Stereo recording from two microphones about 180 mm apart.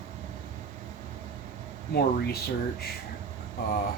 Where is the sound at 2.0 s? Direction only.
60° left (ahead or behind).